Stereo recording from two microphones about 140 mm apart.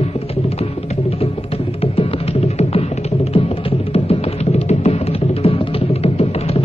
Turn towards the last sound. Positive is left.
turn(degrees=45)  # may be behind; listen again after turning